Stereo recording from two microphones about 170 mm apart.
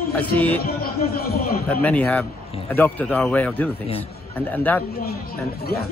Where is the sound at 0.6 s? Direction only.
60° left (ahead or behind).